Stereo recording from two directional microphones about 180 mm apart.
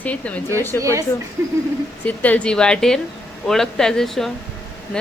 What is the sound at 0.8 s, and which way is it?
Speech, 15° right (ahead or behind).